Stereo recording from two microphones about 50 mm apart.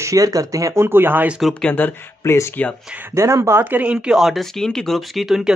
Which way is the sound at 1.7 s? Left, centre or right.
Left.